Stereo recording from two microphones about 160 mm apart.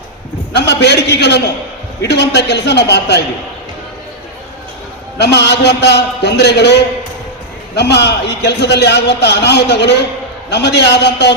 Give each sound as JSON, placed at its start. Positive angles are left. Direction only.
{"t": 0.5, "sound": "a man's voice", "side_deg": 90}
{"t": 5.1, "sound": "a man's voice", "side_deg": 90}
{"t": 7.8, "sound": "a man's voice", "side_deg": 90}